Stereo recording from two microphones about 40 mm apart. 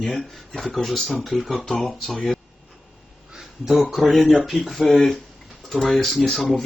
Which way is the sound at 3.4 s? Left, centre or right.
Centre.